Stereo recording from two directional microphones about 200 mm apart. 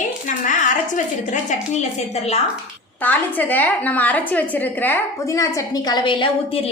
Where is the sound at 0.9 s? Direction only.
40° left (ahead or behind).